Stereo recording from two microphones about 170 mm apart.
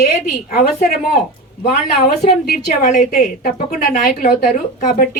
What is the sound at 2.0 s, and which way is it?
A woman's voice, 60° left (ahead or behind).